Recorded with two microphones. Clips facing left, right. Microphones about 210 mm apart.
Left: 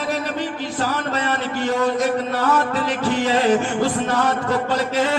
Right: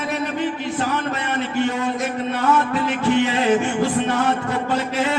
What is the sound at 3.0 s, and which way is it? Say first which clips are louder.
Music: even; 40° left (ahead or behind).